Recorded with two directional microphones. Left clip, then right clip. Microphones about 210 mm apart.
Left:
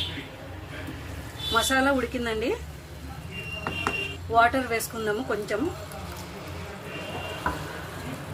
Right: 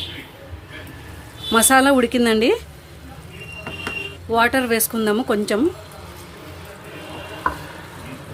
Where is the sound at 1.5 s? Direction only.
50° right (ahead or behind).